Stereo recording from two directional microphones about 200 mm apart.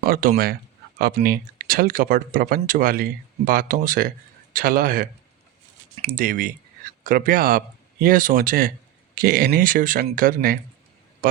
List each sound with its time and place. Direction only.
0.0 s speech: 45° right (ahead or behind)
6.1 s speech: 45° right (ahead or behind)